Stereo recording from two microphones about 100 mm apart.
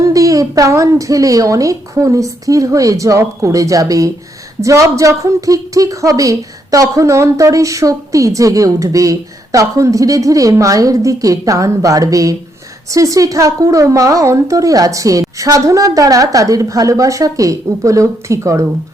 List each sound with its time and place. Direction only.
0.0 s a woman's voice: 35° right (ahead or behind)